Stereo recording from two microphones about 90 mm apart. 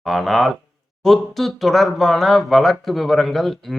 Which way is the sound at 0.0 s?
Centre (ahead or behind).